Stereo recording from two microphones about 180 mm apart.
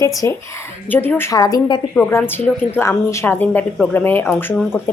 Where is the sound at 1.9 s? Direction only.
10° left (ahead or behind).